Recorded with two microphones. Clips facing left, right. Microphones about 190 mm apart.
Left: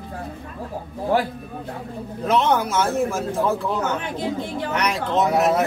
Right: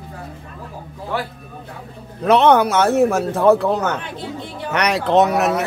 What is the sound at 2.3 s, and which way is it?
A man's voice, 70° right (ahead or behind).